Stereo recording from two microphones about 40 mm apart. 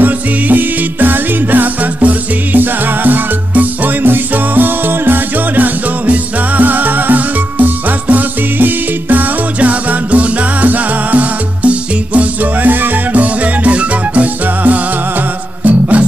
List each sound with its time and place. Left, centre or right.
0.0 s music: right
6.0 s music: right
9.6 s music: right